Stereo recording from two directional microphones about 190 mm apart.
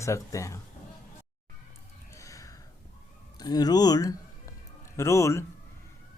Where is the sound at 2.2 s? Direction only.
15° left (ahead or behind).